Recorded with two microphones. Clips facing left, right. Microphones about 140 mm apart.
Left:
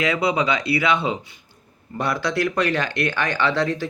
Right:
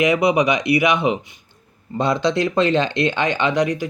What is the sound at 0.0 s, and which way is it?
Speech, 20° right (ahead or behind).